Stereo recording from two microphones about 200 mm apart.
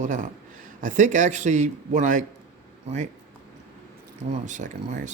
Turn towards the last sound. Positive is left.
turn(degrees=-40)  # may be behind; listen again after turning